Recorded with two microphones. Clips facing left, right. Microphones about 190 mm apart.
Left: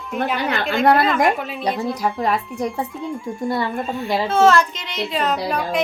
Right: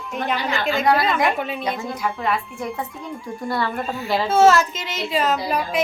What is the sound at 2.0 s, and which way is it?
Speech, 40° left (ahead or behind).